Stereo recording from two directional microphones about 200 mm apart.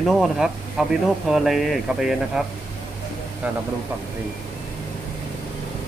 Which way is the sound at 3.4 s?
5° right (ahead or behind).